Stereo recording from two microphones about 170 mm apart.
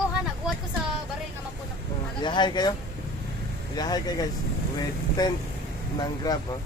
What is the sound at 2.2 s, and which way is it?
Speech, 25° left (ahead or behind).